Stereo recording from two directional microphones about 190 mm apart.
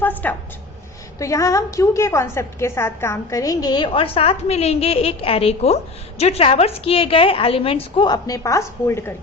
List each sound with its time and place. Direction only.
0.0 s a woman's voice: 10° left (ahead or behind)